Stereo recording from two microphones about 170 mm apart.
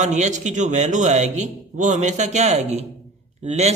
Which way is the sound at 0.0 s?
45° right (ahead or behind).